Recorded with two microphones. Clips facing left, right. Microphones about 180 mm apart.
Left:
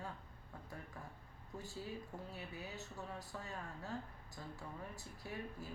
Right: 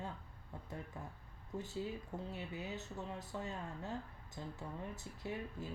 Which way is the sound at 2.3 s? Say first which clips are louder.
Right 4 dB; 20° right (ahead or behind).